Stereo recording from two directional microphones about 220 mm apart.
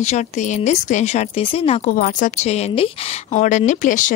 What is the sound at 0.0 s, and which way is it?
Speech, 30° left (ahead or behind).